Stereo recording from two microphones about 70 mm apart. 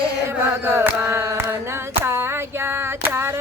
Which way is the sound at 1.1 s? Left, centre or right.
Right.